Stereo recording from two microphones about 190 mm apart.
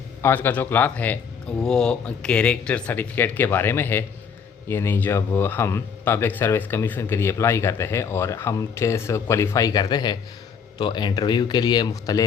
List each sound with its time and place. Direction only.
0.2 s speech: 10° left (ahead or behind)